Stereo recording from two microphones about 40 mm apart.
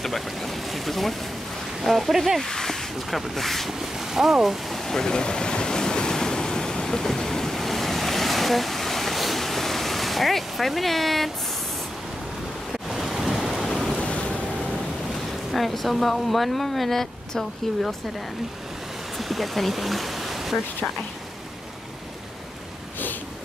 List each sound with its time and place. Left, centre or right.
0.0 s speech: centre
2.4 s speech: centre
3.8 s speech: centre
4.7 s waves: centre
12.7 s ocean: centre
13.9 s boat: left
15.5 s speech: centre
19.1 s speech: centre